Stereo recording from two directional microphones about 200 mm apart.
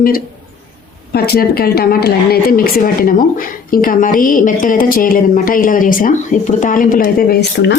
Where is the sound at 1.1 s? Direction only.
50° left (ahead or behind).